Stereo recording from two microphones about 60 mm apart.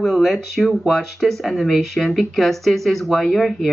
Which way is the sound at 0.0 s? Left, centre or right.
Centre.